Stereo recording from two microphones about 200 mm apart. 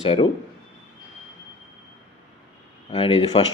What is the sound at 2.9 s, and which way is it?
Speech, 30° left (ahead or behind).